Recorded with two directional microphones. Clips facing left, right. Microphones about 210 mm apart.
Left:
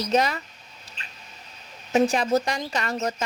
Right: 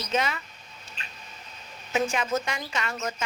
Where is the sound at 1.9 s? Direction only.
35° left (ahead or behind).